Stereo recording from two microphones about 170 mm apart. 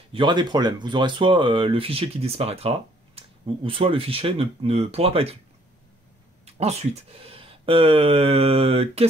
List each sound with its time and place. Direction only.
0.1 s speech: 25° right (ahead or behind)
6.4 s speech: 40° right (ahead or behind)